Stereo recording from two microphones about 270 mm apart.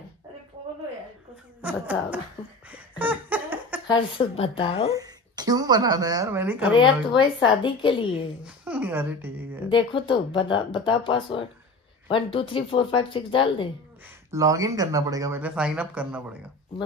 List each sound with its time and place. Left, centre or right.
1.6 s speech: centre
2.7 s laughter: centre
3.8 s speech: centre
4.9 s a woman's voice: centre
6.8 s speech: centre
8.5 s speech: centre
9.7 s speech: centre
14.3 s speech: centre